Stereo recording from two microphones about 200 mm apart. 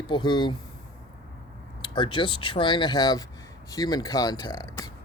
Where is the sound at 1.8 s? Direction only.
25° left (ahead or behind).